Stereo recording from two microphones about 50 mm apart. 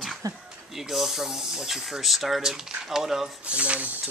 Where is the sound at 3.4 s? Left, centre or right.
Right.